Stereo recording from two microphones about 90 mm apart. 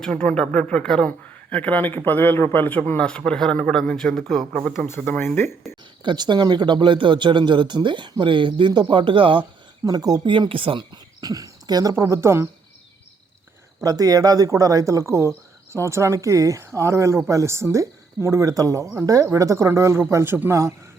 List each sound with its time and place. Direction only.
0.0 s speech: 10° left (ahead or behind)
4.9 s speech: 20° left (ahead or behind)
6.0 s speech: 60° right (ahead or behind)
9.8 s speech: 45° right (ahead or behind)
10.3 s speech: 70° right (ahead or behind); by 12.0 s 40° right (ahead or behind)
12.0 s speech: 30° right (ahead or behind)
13.8 s speech: 45° right (ahead or behind)